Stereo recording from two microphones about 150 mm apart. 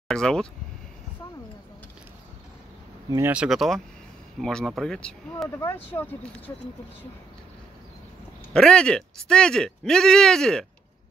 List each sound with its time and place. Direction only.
0.1 s speech: 5° left (ahead or behind)
3.1 s speech: 15° right (ahead or behind); by 6.5 s 15° left (ahead or behind)
8.5 s speech: 5° left (ahead or behind)